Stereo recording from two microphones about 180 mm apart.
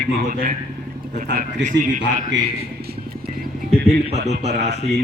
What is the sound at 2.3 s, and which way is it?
Speech, 90° right.